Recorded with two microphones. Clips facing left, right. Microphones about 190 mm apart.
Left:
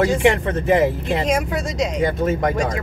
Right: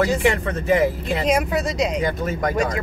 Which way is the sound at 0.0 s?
25° left (ahead or behind).